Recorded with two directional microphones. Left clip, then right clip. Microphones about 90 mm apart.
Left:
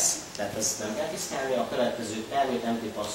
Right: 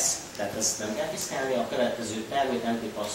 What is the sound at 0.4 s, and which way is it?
A man's voice, 5° right (ahead or behind).